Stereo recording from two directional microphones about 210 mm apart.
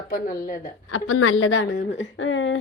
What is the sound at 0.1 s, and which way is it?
Speech, 40° left (ahead or behind).